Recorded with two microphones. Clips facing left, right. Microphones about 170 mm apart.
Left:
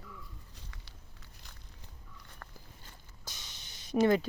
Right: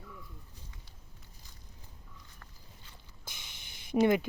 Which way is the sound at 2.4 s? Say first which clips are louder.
Left 5 dB; 55° left (ahead or behind).